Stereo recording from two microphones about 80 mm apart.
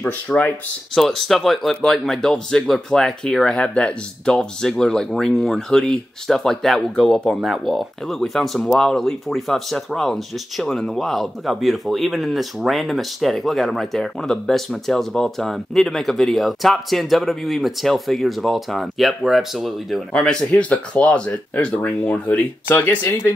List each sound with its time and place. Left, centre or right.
0.0 s speech: centre
0.9 s speech: centre
20.2 s speech: centre; by 23.1 s left